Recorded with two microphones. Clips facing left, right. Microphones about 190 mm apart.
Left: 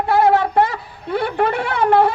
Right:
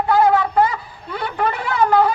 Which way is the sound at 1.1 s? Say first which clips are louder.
Left 4 dB; 60° left (ahead or behind).